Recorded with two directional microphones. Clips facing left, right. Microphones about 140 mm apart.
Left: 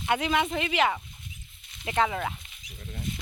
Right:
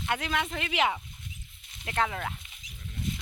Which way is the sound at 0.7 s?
15° right (ahead or behind).